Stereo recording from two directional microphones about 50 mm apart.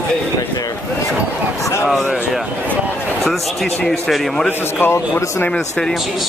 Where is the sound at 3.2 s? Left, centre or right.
Centre.